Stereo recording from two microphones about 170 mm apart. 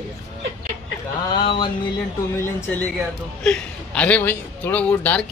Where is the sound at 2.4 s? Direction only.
15° left (ahead or behind).